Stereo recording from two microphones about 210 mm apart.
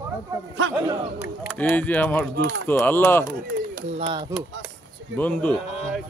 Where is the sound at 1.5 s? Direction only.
5° left (ahead or behind).